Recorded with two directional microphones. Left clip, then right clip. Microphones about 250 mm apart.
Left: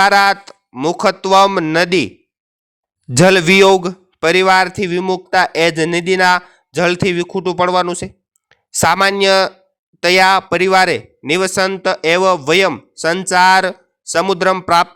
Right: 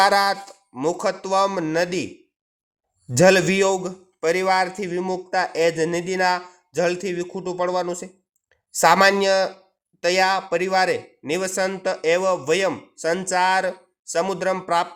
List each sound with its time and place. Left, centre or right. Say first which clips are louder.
0.4 s speech: left 6 dB; left
3.1 s speech: left 5 dB; left